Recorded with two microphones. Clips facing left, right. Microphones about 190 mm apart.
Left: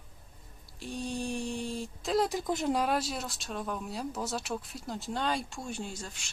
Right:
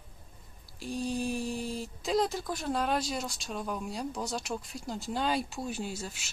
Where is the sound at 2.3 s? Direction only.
20° left (ahead or behind).